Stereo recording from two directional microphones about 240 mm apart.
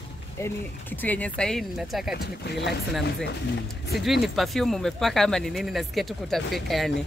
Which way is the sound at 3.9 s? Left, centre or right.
Centre.